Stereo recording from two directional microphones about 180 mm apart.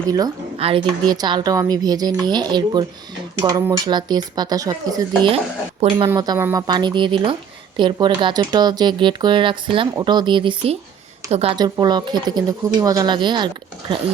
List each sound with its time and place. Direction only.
0.6 s speech: 25° right (ahead or behind)
6.1 s a woman's voice: 20° right (ahead or behind)
11.5 s speech: 25° right (ahead or behind)